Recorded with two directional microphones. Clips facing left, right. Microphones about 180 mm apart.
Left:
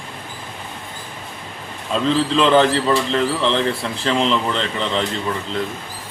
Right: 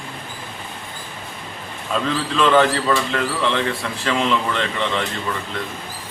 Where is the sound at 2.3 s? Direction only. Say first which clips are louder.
Even; 30° left (ahead or behind).